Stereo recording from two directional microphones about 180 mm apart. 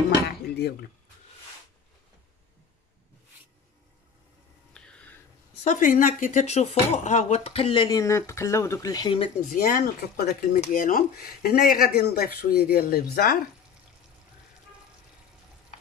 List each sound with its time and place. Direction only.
4.7 s a sound: 5° left (ahead or behind)
5.6 s speech: 45° left (ahead or behind); by 9.3 s 25° left (ahead or behind)
9.5 s speech: 50° left (ahead or behind)